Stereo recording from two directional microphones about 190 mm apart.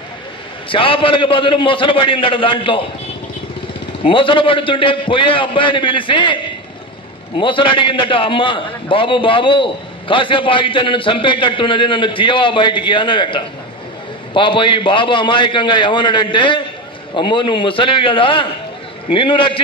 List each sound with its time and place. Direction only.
0.7 s a man's voice: 25° left (ahead or behind)
4.0 s a man's voice: 25° left (ahead or behind)